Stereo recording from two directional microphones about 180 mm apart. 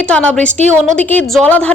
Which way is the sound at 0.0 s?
5° left (ahead or behind).